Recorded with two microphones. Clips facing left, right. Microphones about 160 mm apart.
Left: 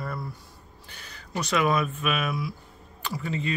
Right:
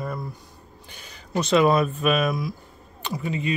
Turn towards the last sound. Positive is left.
turn(degrees=-15)  # may be behind; listen again after turning